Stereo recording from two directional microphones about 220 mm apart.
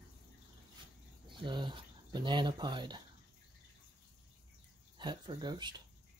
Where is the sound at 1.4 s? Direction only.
20° right (ahead or behind).